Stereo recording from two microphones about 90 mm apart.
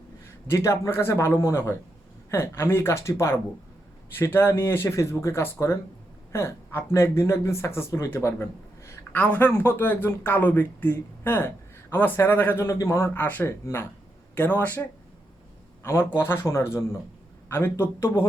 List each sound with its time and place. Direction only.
0.4 s speech: 30° left (ahead or behind)
9.1 s speech: 15° left (ahead or behind); by 13.1 s 35° left (ahead or behind)
13.1 s speech: 20° left (ahead or behind)
15.8 s a man's voice: 30° left (ahead or behind)